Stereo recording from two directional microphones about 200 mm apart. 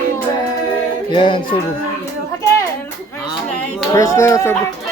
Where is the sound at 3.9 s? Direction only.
15° left (ahead or behind).